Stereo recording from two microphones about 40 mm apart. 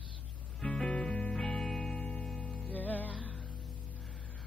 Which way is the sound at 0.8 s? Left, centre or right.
Centre.